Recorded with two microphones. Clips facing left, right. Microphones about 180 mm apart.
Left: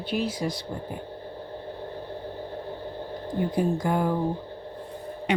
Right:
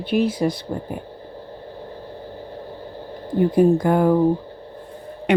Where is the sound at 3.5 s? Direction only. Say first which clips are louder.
Right 9 dB; 60° right (ahead or behind).